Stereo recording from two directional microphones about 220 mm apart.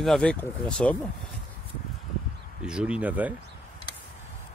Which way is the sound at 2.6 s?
5° right (ahead or behind).